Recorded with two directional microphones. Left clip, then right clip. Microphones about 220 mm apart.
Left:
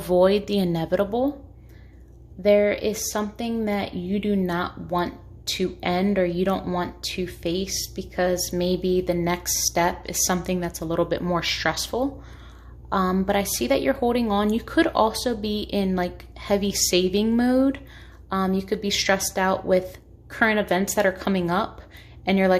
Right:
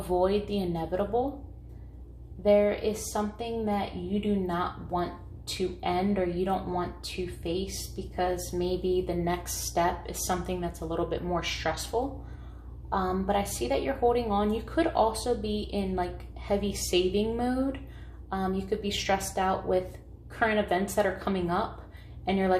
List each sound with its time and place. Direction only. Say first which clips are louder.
0.1 s a woman's voice: left 8 dB; 50° left (ahead or behind)
2.4 s a woman's voice: left 4 dB; 50° left (ahead or behind)
12.9 s a woman's voice: left 5 dB; 45° left (ahead or behind)